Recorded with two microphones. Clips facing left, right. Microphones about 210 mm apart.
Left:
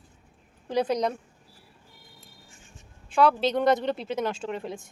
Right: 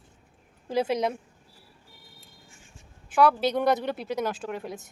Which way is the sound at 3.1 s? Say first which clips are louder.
Even; 5° right (ahead or behind).